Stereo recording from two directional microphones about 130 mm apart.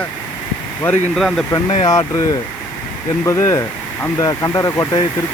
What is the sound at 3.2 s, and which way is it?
Speech, 25° left (ahead or behind).